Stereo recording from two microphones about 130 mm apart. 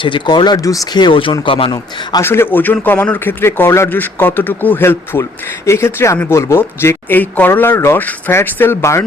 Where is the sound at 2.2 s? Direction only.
20° left (ahead or behind).